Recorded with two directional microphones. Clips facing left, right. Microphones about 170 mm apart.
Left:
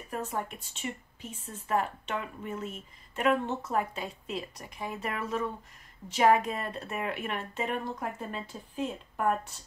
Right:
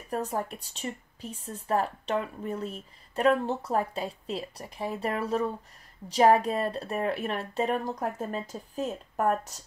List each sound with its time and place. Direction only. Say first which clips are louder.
0.1 s a woman's voice: right 4 dB; 35° right (ahead or behind)